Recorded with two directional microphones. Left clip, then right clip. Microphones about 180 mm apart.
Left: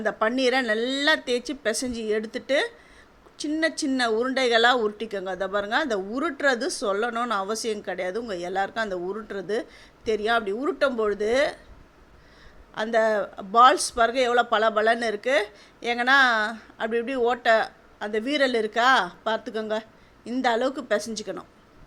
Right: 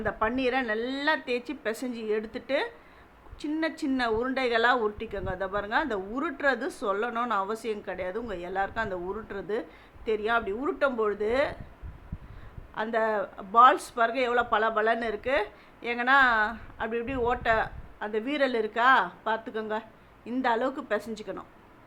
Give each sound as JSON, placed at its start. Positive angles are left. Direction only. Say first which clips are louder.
{"t": 0.0, "sound": "speech", "louder": "left 5 dB", "side_deg": 30}
{"t": 12.7, "sound": "speech", "louder": "left 5 dB", "side_deg": 25}